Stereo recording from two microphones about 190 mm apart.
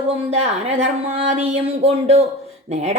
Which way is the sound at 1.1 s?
30° right (ahead or behind).